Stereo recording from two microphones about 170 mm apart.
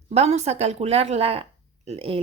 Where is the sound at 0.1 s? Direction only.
40° right (ahead or behind).